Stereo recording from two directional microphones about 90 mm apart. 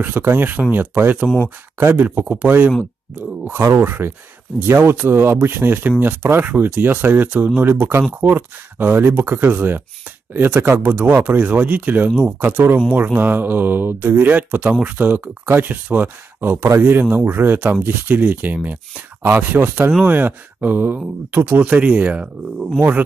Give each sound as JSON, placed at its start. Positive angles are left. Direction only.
{"t": 0.2, "sound": "speech", "side_deg": -20}